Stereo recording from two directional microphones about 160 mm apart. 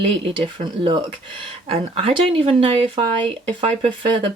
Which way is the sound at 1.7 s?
35° right (ahead or behind).